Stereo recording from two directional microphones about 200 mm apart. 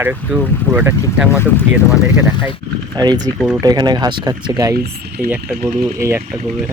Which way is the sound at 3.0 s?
20° right (ahead or behind).